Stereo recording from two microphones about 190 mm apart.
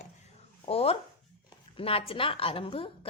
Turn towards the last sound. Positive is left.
turn(degrees=30)  # may be behind; listen again after turning